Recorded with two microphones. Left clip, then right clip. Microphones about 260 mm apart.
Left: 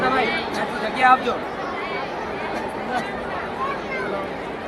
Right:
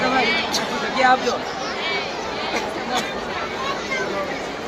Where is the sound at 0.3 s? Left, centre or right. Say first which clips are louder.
Right 3 dB; centre.